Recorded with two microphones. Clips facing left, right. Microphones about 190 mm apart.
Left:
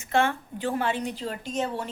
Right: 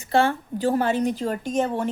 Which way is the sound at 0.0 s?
35° right (ahead or behind).